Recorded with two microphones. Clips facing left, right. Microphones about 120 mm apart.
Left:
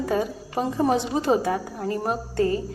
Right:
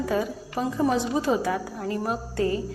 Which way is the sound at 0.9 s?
55° left (ahead or behind).